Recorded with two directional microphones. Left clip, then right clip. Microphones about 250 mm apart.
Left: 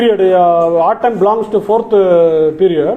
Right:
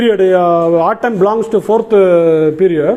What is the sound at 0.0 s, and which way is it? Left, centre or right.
A man's voice, right.